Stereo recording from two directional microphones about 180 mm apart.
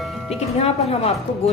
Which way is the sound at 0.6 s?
35° left (ahead or behind).